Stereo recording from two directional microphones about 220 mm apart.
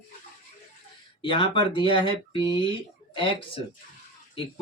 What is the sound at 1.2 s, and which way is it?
Speech, 25° left (ahead or behind).